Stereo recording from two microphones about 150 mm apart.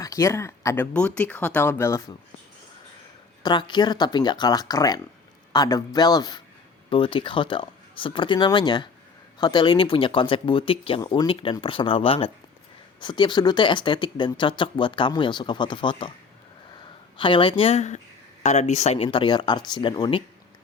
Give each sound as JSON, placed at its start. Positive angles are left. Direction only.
{"t": 0.0, "sound": "speech", "side_deg": 20}
{"t": 0.9, "sound": "speech", "side_deg": 10}
{"t": 3.4, "sound": "speech", "side_deg": 30}
{"t": 11.0, "sound": "speech", "side_deg": 25}
{"t": 11.3, "sound": "speech", "side_deg": 35}
{"t": 17.2, "sound": "speech", "side_deg": 35}
{"t": 19.0, "sound": "speech", "side_deg": 35}